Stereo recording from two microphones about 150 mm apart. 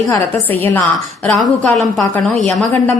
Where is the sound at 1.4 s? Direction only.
Centre (ahead or behind).